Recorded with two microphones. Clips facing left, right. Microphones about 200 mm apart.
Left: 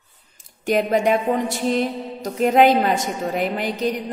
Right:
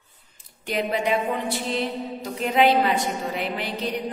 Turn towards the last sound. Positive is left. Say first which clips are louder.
# left 5 dB
turn(degrees=45)  # may be behind; listen again after turning